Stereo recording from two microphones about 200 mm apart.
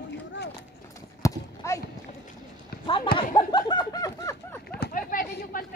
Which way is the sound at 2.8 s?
25° left (ahead or behind).